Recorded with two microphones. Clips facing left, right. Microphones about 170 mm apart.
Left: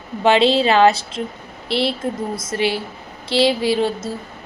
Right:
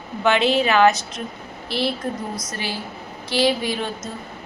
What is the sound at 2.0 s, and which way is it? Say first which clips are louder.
Speech: left 4 dB; 25° left (ahead or behind).